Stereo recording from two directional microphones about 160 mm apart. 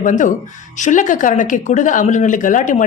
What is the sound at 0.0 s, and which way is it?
A woman's voice, 50° left (ahead or behind).